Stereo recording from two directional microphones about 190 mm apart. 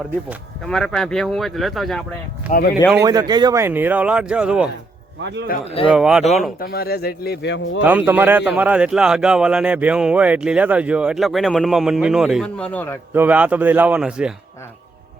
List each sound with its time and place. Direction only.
0.3 s speech: 5° left (ahead or behind)
2.5 s speech: 55° left (ahead or behind)
3.0 s speech: 20° right (ahead or behind)
5.5 s speech: 50° left (ahead or behind)
5.9 s speech: 5° right (ahead or behind)
6.6 s speech: 55° left (ahead or behind)
7.8 s speech: 10° right (ahead or behind); by 13.0 s 10° left (ahead or behind)
13.1 s speech: 10° right (ahead or behind)